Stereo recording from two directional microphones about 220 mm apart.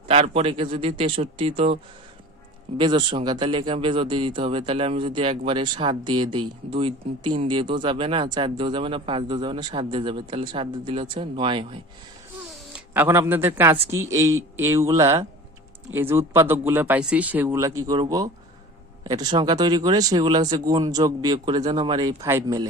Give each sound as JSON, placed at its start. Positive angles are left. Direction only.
{"t": 0.1, "sound": "speech", "side_deg": -25}
{"t": 12.7, "sound": "a man's voice", "side_deg": -10}